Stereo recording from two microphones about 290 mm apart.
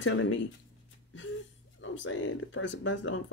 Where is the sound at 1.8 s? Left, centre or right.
Left.